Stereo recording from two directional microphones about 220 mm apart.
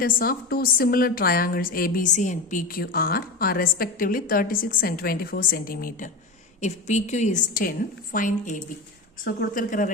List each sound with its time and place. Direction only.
0.0 s a woman's voice: 40° left (ahead or behind)